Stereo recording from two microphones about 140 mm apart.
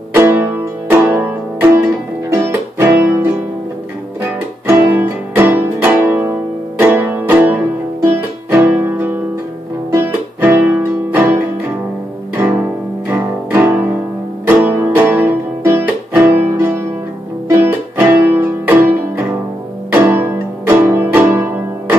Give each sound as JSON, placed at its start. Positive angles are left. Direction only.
{"t": 0.1, "sound": "music", "side_deg": -15}
{"t": 13.1, "sound": "music", "side_deg": -15}